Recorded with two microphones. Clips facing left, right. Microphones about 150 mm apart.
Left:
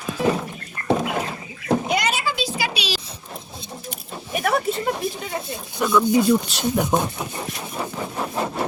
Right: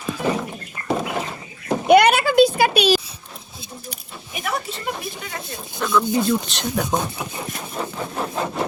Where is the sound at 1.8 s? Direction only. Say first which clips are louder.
Right 9 dB; 60° right (ahead or behind).